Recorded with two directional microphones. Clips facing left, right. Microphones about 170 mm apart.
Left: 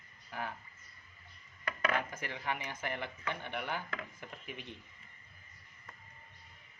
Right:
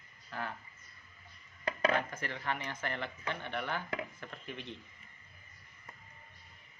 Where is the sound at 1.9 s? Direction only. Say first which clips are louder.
Right 2 dB; 15° left (ahead or behind).